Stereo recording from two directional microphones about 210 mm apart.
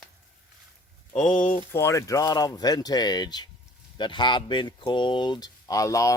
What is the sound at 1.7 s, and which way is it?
Speech, 15° left (ahead or behind).